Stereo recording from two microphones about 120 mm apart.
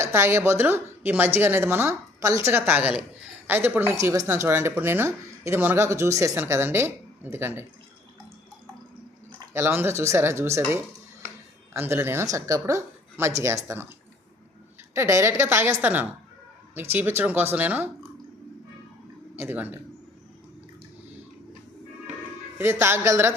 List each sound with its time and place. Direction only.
0.0 s speech: 20° right (ahead or behind)
9.5 s speech: 20° right (ahead or behind)
14.9 s speech: 25° right (ahead or behind)
19.4 s speech: 15° right (ahead or behind)
22.5 s speech: 20° right (ahead or behind)